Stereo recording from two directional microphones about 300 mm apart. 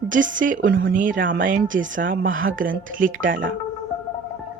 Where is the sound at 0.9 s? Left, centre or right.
Right.